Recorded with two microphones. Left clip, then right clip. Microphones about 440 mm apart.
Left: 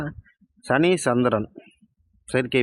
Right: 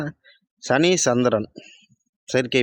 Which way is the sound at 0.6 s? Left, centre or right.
Left.